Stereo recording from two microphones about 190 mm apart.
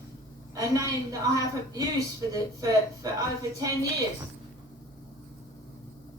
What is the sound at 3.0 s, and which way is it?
Speech, 20° right (ahead or behind).